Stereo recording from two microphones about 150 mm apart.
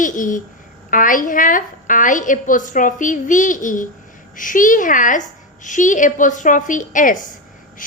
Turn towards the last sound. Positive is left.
turn(degrees=60)  # may be behind; listen again after turning